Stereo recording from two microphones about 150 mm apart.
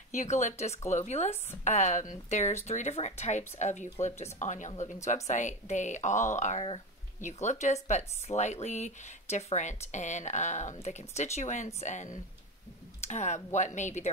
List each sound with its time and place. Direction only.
0.1 s speech: 55° left (ahead or behind)